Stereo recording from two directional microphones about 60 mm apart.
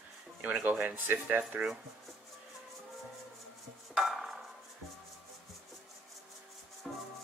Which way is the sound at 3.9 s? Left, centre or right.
Centre.